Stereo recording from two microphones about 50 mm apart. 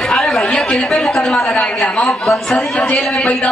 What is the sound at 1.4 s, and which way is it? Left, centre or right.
A man's voice, left.